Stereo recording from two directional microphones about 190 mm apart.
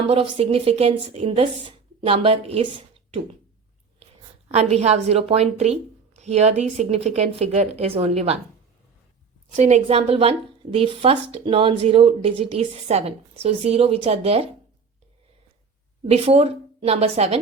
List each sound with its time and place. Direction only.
0.1 s a woman's voice: 30° right (ahead or behind)
9.5 s a woman's voice: 40° right (ahead or behind)
16.0 s a woman's voice: 35° right (ahead or behind)